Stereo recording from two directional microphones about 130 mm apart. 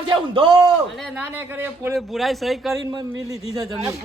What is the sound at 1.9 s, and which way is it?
Speech, centre (ahead or behind).